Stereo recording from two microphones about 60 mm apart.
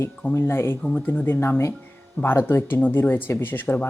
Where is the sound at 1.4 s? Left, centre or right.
Left.